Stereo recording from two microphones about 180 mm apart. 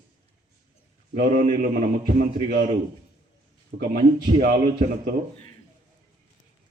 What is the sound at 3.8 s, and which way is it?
Speech, 55° right (ahead or behind).